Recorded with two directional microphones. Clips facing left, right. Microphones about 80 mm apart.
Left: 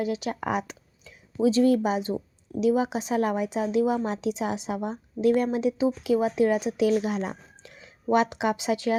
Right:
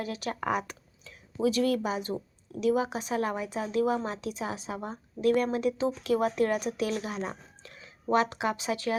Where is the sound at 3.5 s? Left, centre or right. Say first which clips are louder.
Left 2 dB; left.